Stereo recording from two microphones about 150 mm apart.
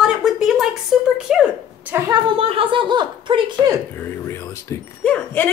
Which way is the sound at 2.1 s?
35° right (ahead or behind).